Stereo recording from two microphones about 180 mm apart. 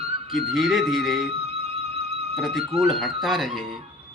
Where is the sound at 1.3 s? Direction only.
35° right (ahead or behind).